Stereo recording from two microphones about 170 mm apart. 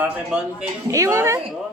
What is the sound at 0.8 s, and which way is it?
Speech, 20° right (ahead or behind).